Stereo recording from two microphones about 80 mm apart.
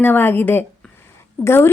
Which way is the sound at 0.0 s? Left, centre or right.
Left.